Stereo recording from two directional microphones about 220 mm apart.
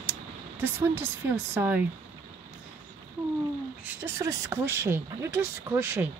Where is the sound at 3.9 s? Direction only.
15° right (ahead or behind).